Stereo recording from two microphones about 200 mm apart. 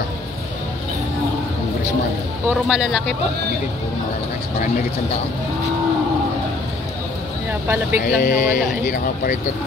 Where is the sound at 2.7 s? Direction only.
Centre (ahead or behind).